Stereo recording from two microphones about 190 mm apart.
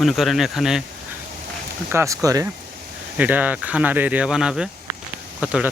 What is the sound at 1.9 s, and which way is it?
Speech, 15° right (ahead or behind).